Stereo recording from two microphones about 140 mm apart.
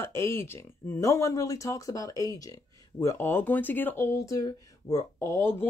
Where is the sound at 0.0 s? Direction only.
15° left (ahead or behind).